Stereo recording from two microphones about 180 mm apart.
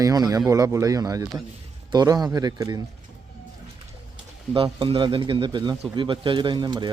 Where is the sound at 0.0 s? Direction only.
20° right (ahead or behind).